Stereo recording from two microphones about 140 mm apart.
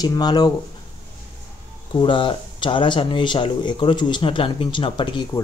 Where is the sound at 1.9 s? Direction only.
35° left (ahead or behind).